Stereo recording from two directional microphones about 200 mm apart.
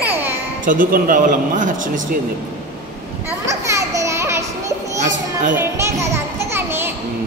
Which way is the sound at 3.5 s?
15° right (ahead or behind).